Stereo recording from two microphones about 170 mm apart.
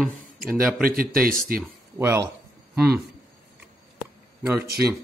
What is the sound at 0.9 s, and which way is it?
Speech, 55° right (ahead or behind).